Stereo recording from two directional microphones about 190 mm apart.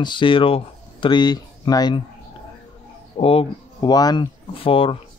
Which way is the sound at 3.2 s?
30° left (ahead or behind).